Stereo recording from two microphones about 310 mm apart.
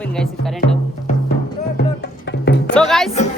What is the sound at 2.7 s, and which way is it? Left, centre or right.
Music, centre.